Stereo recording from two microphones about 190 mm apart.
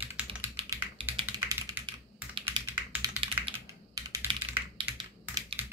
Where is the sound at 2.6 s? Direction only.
10° right (ahead or behind).